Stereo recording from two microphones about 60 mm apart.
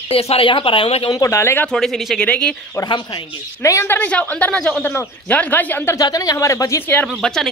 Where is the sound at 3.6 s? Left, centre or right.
Left.